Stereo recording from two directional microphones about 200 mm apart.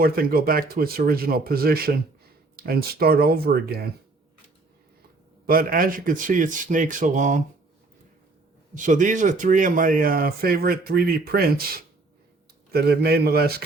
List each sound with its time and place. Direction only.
0.0 s speech: 50° right (ahead or behind)
5.5 s a man's voice: 45° right (ahead or behind)
8.7 s speech: 40° right (ahead or behind)